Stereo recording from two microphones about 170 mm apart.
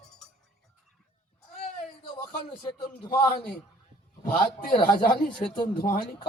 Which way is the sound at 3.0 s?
30° left (ahead or behind).